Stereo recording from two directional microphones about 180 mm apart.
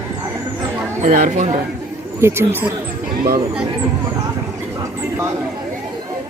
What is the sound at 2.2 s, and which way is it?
Speech, 15° right (ahead or behind).